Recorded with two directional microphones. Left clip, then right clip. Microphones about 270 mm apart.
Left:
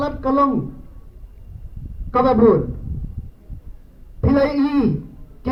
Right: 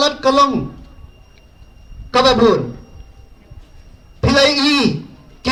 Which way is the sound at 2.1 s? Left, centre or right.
Right.